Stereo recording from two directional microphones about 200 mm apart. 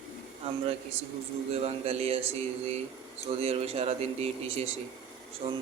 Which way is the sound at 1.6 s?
30° right (ahead or behind).